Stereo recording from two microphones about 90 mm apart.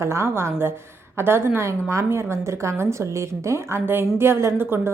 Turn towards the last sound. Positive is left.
turn(degrees=-25)  # may be behind; listen again after turning